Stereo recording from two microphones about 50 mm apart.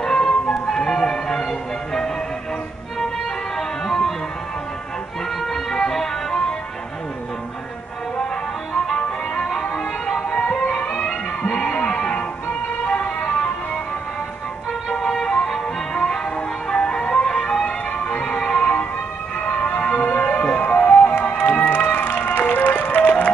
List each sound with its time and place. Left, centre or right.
0.0 s music: centre
3.5 s music: centre
5.4 s music: centre
8.7 s music: centre
12.8 s vehicle: centre
14.9 s music: centre
16.7 s music: centre
18.6 s music: left
20.0 s music: left